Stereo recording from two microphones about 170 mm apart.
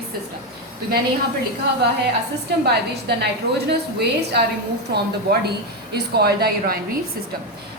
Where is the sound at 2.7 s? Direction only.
75° right (ahead or behind).